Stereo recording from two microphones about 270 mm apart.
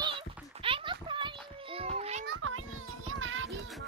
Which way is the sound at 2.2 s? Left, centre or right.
Right.